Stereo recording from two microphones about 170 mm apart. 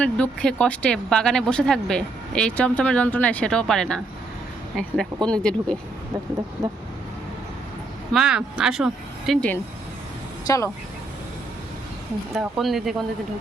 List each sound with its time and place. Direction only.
0.0 s speech: 5° left (ahead or behind)
8.1 s speech: 5° right (ahead or behind)
10.4 s speech: 20° left (ahead or behind)
12.4 s speech: centre (ahead or behind)